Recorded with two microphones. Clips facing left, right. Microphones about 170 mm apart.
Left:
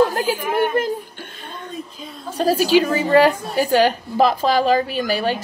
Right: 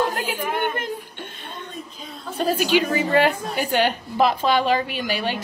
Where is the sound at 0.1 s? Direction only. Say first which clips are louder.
Left 6 dB; 30° left (ahead or behind).